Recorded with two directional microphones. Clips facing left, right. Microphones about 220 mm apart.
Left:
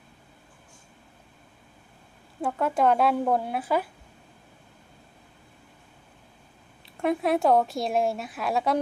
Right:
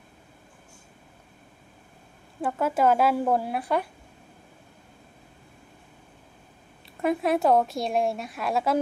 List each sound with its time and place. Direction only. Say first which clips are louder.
2.4 s a woman's voice: even; centre (ahead or behind)
6.9 s a woman's voice: even; centre (ahead or behind)